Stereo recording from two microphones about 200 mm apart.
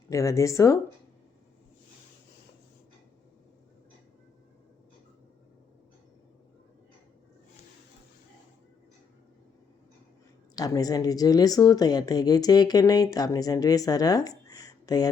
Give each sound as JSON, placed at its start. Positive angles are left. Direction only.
{"t": 0.1, "sound": "speech", "side_deg": 15}
{"t": 10.6, "sound": "speech", "side_deg": 20}